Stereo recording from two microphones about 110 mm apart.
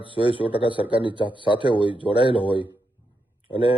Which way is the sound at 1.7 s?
50° left (ahead or behind).